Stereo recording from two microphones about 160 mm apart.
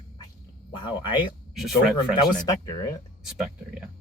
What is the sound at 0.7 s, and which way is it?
Speech, 30° left (ahead or behind).